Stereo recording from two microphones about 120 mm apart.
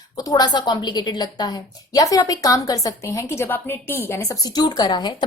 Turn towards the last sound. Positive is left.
turn(degrees=35)  # may be behind; listen again after turning